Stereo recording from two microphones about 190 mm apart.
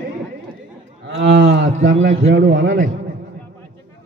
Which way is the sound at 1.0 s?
90° right.